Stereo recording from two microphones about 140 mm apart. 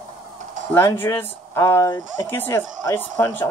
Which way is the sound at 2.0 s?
60° right (ahead or behind).